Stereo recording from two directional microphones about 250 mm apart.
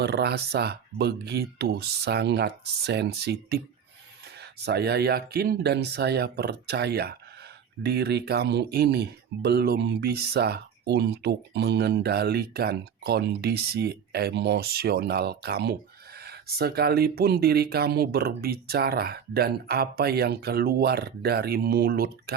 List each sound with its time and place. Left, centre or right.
0.0 s speech: right